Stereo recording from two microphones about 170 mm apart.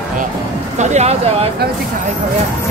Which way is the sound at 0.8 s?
40° right (ahead or behind).